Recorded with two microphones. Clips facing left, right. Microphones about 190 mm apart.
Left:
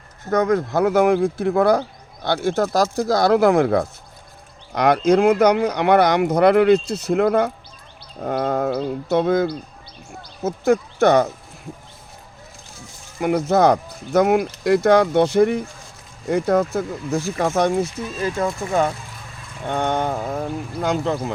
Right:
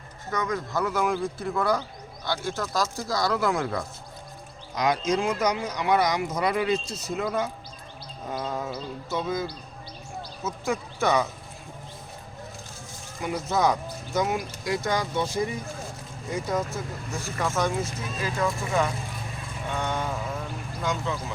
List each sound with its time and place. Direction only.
0.3 s speech: 60° left (ahead or behind)
13.1 s speech: 60° left (ahead or behind)
18.3 s speech: 35° left (ahead or behind)
19.6 s speech: 60° left (ahead or behind)